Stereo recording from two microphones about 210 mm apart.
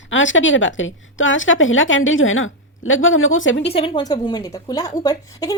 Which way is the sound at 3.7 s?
25° left (ahead or behind).